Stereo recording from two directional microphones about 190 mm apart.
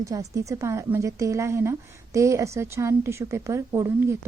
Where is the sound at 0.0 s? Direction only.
15° right (ahead or behind).